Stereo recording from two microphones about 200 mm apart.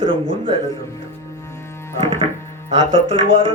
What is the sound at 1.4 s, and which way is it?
Music, 15° left (ahead or behind).